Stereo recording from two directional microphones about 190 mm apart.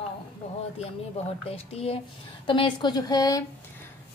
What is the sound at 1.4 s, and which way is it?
A woman's voice, 30° left (ahead or behind).